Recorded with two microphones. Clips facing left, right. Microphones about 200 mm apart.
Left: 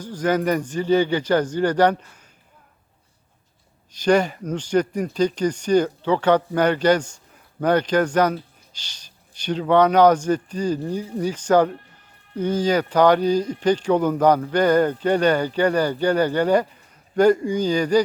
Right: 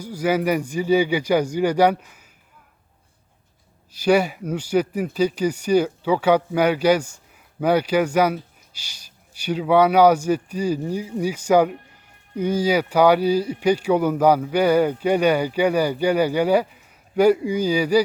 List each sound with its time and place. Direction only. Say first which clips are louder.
0.0 s speech: even; 10° right (ahead or behind)
3.9 s speech: even; 10° right (ahead or behind)